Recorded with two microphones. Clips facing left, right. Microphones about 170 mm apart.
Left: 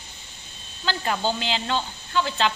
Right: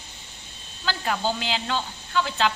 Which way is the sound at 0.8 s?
5° right (ahead or behind).